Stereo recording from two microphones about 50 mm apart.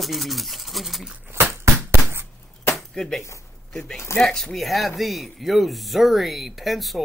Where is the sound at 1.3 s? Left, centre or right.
Right.